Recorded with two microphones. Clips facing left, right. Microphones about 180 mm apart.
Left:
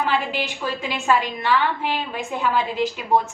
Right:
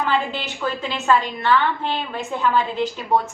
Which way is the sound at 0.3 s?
10° left (ahead or behind).